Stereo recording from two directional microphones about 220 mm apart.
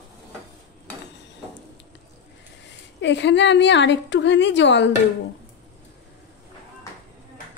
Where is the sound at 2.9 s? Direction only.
55° left (ahead or behind).